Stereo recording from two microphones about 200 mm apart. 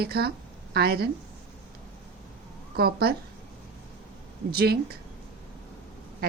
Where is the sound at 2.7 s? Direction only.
50° right (ahead or behind).